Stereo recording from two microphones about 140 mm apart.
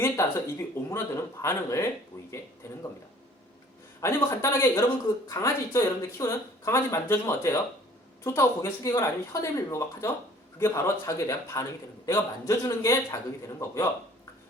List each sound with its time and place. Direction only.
0.0 s speech: 20° left (ahead or behind)
4.0 s speech: 20° left (ahead or behind)